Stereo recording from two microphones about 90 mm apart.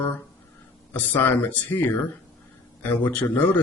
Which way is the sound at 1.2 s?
20° left (ahead or behind).